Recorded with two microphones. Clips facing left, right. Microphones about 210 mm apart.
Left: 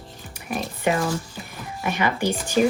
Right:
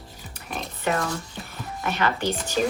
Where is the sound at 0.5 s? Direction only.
10° left (ahead or behind).